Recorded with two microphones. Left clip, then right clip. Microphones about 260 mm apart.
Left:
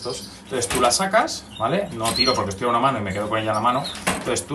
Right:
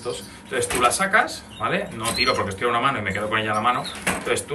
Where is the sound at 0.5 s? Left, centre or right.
Centre.